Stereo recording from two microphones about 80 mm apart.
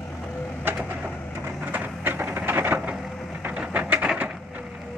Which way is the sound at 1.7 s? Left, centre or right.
Right.